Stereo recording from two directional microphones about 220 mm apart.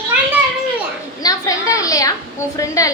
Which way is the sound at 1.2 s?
15° left (ahead or behind).